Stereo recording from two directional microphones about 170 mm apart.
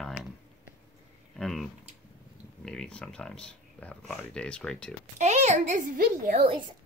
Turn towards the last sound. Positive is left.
turn(degrees=-30)  # may be behind; listen again after turning